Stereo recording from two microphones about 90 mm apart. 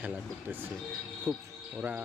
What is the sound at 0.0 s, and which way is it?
Speech, 20° right (ahead or behind).